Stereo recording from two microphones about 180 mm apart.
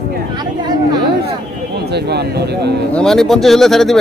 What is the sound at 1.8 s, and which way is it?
Speech, 65° right (ahead or behind).